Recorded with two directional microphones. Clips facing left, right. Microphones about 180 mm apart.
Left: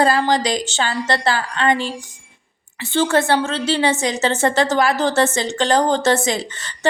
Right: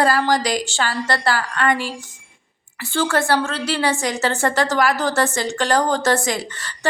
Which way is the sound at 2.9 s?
20° left (ahead or behind).